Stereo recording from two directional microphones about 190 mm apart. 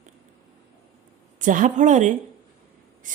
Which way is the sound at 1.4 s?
45° right (ahead or behind).